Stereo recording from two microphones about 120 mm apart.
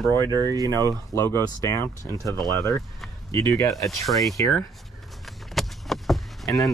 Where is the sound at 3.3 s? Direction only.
30° left (ahead or behind).